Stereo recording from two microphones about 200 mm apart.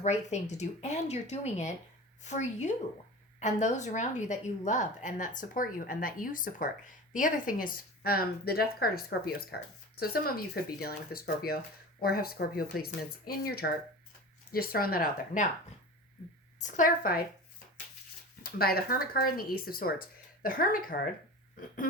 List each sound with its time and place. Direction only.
0.0 s a woman's voice: 35° left (ahead or behind)
16.6 s speech: 40° left (ahead or behind)
18.4 s speech: 50° left (ahead or behind)